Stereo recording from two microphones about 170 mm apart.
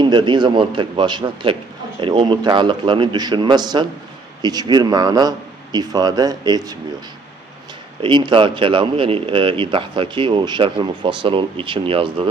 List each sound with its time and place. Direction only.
0.0 s speech: 25° right (ahead or behind)
8.0 s speech: 30° right (ahead or behind)